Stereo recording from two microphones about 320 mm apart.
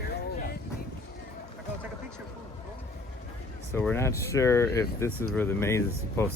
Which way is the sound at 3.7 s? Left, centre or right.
Centre.